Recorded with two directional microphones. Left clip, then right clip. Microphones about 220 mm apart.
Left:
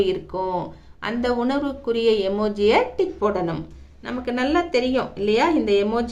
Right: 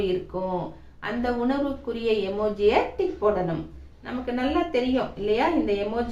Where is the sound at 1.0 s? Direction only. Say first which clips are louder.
Left 3 dB; 50° left (ahead or behind).